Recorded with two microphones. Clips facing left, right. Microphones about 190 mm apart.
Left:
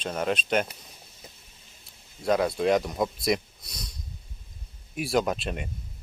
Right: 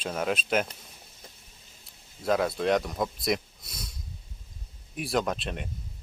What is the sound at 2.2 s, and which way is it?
Speech, centre (ahead or behind).